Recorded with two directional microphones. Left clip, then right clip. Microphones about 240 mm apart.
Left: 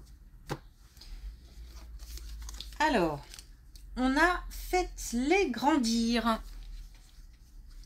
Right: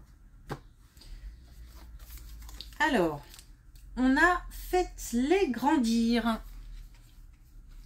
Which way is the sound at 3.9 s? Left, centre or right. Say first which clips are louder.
Right 2 dB; left.